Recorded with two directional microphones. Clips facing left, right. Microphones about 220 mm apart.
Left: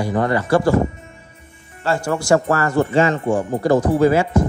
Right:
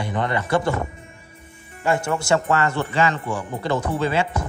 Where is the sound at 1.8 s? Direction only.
25° right (ahead or behind).